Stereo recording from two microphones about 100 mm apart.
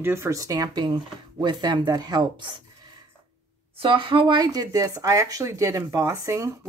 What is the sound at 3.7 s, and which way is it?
Speech, 55° right (ahead or behind).